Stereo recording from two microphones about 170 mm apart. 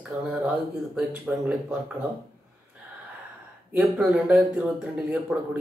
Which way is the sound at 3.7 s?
Centre (ahead or behind).